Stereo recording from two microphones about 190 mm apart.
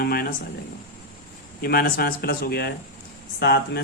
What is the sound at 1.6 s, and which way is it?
Speech, 50° left (ahead or behind).